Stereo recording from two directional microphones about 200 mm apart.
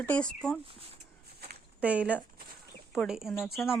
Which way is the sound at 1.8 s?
5° right (ahead or behind).